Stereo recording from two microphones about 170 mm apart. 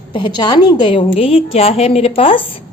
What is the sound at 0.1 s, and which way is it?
A woman's voice, 25° left (ahead or behind).